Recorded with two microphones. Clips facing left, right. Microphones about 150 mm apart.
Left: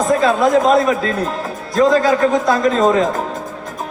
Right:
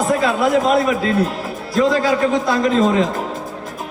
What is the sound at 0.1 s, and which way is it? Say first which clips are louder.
A man's voice: left 4 dB; 40° left (ahead or behind).